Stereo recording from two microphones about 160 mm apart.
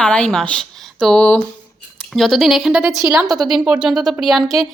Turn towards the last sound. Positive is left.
turn(degrees=0)  # may be behind; listen again after turning